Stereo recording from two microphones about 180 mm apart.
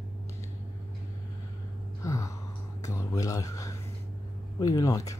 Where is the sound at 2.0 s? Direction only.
15° left (ahead or behind).